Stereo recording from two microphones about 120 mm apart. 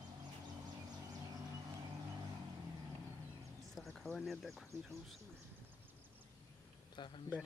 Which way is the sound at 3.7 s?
5° left (ahead or behind).